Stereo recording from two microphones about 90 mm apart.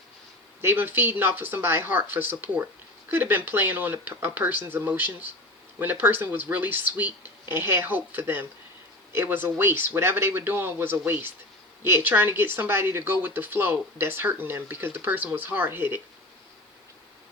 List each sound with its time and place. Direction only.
0.6 s speech: 25° right (ahead or behind)